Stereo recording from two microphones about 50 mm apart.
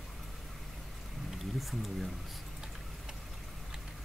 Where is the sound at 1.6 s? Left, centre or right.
Centre.